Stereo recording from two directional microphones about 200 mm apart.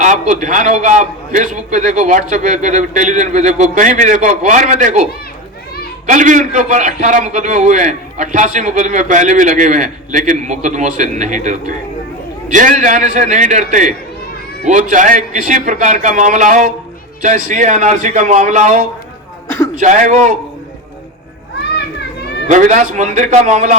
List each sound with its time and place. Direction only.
0.0 s a man's voice: 40° right (ahead or behind)
6.1 s a man's voice: 40° right (ahead or behind)
19.5 s a man's voice: 15° left (ahead or behind)
19.8 s a man's voice: 40° right (ahead or behind)
21.8 s children playing: 55° left (ahead or behind)
22.4 s a man's voice: 40° right (ahead or behind)